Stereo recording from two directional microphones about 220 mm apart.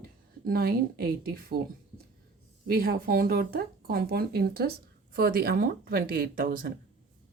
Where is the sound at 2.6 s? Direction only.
45° right (ahead or behind).